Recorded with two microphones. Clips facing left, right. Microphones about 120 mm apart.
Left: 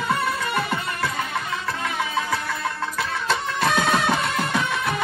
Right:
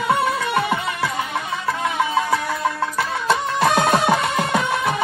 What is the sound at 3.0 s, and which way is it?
Music, 60° right (ahead or behind).